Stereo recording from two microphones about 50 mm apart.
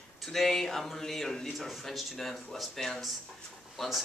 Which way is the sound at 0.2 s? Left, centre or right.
Centre.